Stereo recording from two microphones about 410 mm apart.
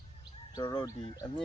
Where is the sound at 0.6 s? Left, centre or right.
Centre.